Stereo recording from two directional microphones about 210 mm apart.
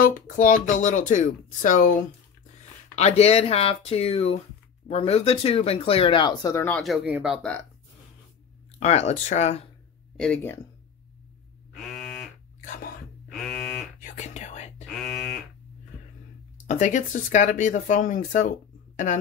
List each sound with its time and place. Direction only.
0.0 s speech: 40° left (ahead or behind)
3.0 s speech: 30° left (ahead or behind); by 7.5 s 5° right (ahead or behind)
8.7 s speech: 30° left (ahead or behind)
10.1 s speech: 5° left (ahead or behind)
11.7 s a sound: centre (ahead or behind)
12.5 s whispering: 40° left (ahead or behind)
13.3 s buzzer: centre (ahead or behind)
14.0 s whispering: 35° left (ahead or behind)
14.9 s a sound: centre (ahead or behind)
16.6 s speech: 35° left (ahead or behind)